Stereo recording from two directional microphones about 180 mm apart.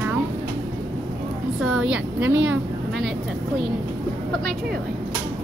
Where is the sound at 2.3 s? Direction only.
90° right.